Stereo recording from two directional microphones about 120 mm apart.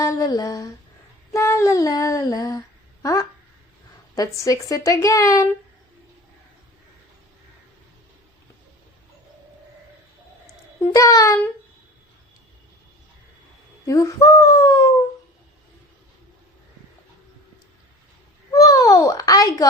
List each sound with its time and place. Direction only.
0.0 s speech: 25° left (ahead or behind)
10.9 s speech: 30° left (ahead or behind)
13.8 s speech: 25° left (ahead or behind)
18.5 s a child's voice: 30° left (ahead or behind)